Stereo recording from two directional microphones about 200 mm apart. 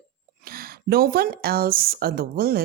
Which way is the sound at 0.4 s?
50° right (ahead or behind).